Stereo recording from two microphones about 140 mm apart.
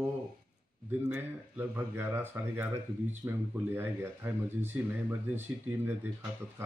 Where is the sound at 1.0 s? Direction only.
15° right (ahead or behind).